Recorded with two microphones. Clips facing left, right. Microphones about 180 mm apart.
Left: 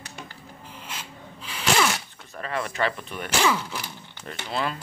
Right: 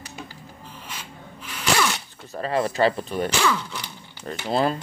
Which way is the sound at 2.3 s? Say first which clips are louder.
Right 6 dB; 30° right (ahead or behind).